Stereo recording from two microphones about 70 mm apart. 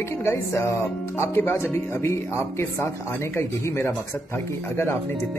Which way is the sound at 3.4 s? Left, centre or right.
Left.